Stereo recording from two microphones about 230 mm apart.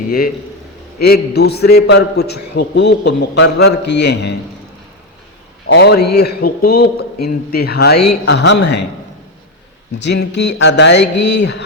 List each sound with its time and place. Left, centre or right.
0.9 s a man's voice: left
5.6 s a man's voice: left
10.0 s a man's voice: left